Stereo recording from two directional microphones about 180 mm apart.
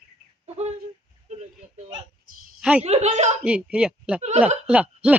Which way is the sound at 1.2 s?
40° right (ahead or behind).